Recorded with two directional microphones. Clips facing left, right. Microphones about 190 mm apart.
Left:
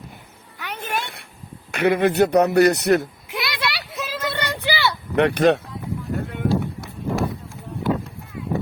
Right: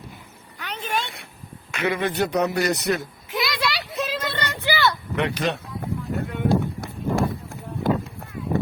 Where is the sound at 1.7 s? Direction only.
55° left (ahead or behind).